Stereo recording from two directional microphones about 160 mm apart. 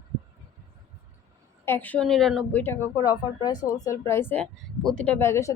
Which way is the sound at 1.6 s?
10° left (ahead or behind).